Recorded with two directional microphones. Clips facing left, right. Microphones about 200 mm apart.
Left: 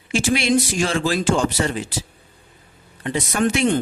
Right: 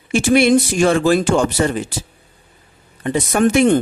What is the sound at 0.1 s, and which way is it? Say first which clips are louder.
Speech: right 6 dB; 55° right (ahead or behind).